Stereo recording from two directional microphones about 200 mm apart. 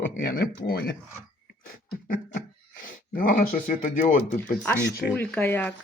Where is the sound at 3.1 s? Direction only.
45° left (ahead or behind).